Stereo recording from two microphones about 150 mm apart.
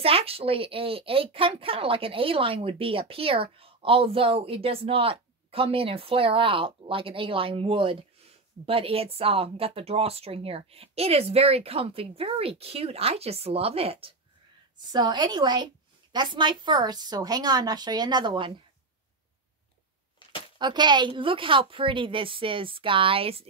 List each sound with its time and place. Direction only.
0.0 s a woman's voice: 40° right (ahead or behind)
14.9 s a woman's voice: 30° right (ahead or behind)
20.5 s a woman's voice: 30° right (ahead or behind)